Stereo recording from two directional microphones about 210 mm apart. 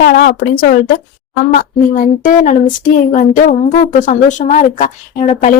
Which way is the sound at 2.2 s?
40° left (ahead or behind).